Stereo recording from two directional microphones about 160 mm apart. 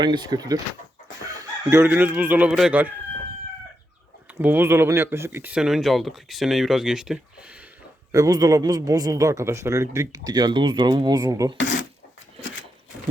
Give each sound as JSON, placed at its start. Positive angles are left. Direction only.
{"t": 0.0, "sound": "a man's voice", "side_deg": -25}
{"t": 4.4, "sound": "speech", "side_deg": -10}
{"t": 8.1, "sound": "a man's voice", "side_deg": -20}